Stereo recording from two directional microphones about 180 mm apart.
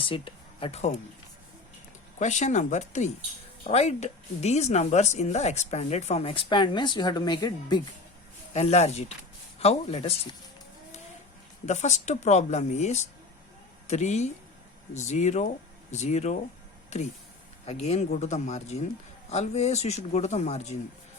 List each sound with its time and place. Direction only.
0.0 s speech: 30° left (ahead or behind)
2.1 s speech: 40° left (ahead or behind); by 7.8 s 25° left (ahead or behind)
8.5 s speech: 35° left (ahead or behind)
11.6 s speech: 40° left (ahead or behind)